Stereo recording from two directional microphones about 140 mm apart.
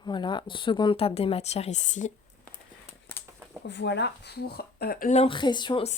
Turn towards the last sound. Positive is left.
turn(degrees=30)  # may be behind; listen again after turning